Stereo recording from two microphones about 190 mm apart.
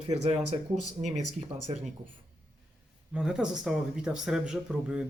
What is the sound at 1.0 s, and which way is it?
Speech, 25° right (ahead or behind).